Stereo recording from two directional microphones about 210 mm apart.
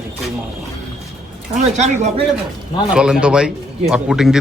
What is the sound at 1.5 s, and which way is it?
Speech, 35° right (ahead or behind).